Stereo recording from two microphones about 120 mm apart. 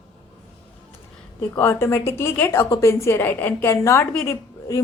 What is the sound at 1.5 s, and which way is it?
A woman's voice, 20° left (ahead or behind).